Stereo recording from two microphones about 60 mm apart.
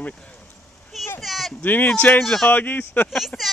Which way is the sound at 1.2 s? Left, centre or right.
Centre.